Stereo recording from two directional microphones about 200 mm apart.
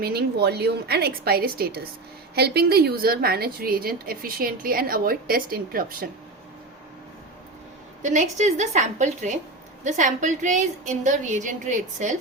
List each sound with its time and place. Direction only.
0.0 s a woman's voice: 50° right (ahead or behind)
8.0 s a woman's voice: 40° right (ahead or behind)